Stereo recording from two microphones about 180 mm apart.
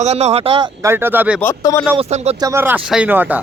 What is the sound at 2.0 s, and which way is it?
Speech, 35° right (ahead or behind).